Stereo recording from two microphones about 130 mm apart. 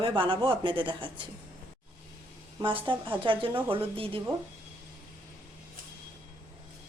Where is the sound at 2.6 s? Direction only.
40° right (ahead or behind).